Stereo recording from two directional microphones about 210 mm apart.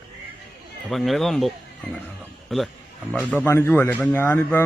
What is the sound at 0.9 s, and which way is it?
A man's voice, centre (ahead or behind).